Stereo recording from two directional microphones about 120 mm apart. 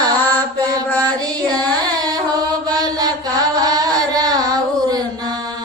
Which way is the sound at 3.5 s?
35° right (ahead or behind).